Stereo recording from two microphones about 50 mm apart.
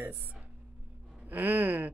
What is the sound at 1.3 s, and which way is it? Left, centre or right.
Speech, right.